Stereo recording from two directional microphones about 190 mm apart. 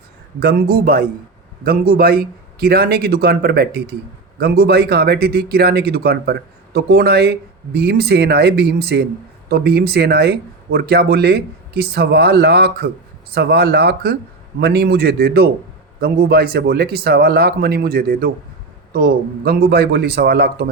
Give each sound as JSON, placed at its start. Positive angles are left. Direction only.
{"t": 0.3, "sound": "a man's voice", "side_deg": -55}